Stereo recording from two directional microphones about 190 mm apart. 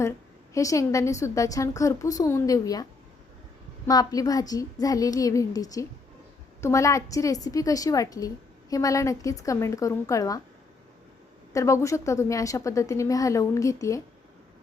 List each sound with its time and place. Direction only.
0.5 s a woman's voice: 15° left (ahead or behind)
3.8 s a woman's voice: 20° left (ahead or behind)
11.5 s a woman's voice: 15° left (ahead or behind)